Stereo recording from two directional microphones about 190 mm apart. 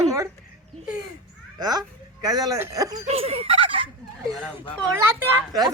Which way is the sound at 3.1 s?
30° right (ahead or behind).